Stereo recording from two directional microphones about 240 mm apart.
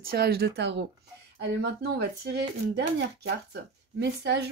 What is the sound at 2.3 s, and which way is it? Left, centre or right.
Speech, right.